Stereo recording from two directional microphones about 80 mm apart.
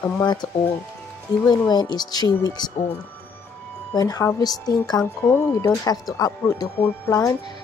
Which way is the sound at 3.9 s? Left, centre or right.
Left.